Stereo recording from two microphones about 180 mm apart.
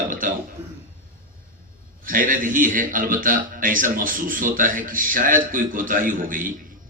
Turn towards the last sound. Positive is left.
turn(degrees=-50)  # may be behind; listen again after turning